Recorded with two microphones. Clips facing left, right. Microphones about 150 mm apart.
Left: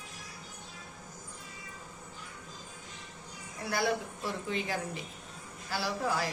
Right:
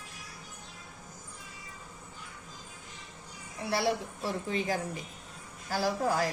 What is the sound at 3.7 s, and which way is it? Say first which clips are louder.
A woman's voice: right 1 dB; 35° right (ahead or behind).